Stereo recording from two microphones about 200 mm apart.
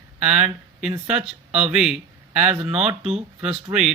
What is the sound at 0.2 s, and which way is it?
Speech, 5° right (ahead or behind).